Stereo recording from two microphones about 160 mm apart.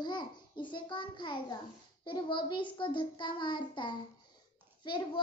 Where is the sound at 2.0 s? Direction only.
30° left (ahead or behind).